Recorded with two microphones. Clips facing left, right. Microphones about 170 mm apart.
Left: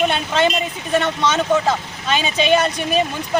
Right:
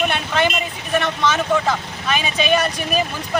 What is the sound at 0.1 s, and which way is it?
Speech, 25° left (ahead or behind).